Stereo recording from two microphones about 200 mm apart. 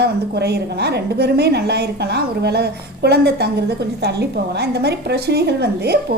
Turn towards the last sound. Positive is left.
turn(degrees=-55)  # may be behind; listen again after turning